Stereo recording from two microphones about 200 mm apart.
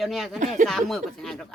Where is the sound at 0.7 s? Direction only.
Centre (ahead or behind).